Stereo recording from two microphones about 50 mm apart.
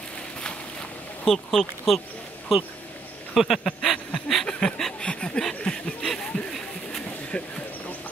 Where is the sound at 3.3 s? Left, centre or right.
Centre.